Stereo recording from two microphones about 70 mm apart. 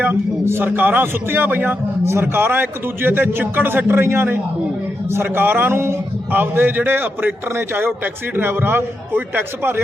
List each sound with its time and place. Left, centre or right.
0.0 s a man's voice: right